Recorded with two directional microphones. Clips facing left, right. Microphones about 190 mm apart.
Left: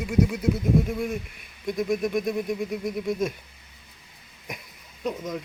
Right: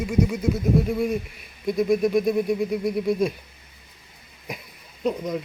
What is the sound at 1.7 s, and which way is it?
Speech, 5° right (ahead or behind).